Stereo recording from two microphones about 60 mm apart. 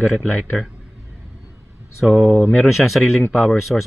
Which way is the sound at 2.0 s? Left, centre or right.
Centre.